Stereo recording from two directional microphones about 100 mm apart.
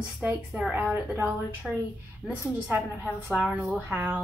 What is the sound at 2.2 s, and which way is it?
Speech, centre (ahead or behind).